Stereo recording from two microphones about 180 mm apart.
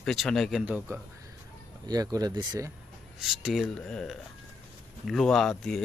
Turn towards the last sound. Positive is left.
turn(degrees=0)  # may be behind; listen again after turning